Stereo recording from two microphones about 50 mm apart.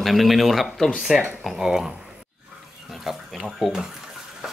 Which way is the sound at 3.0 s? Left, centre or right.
Centre.